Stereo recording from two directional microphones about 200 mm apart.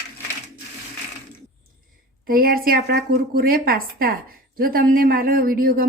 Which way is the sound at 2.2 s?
45° right (ahead or behind).